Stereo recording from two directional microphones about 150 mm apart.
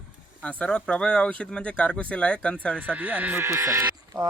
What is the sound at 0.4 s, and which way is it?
Speech, 5° left (ahead or behind).